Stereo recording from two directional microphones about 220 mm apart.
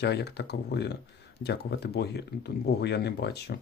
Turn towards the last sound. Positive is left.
turn(degrees=45)  # may be behind; listen again after turning